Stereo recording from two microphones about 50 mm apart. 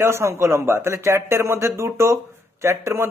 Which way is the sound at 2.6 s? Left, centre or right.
Right.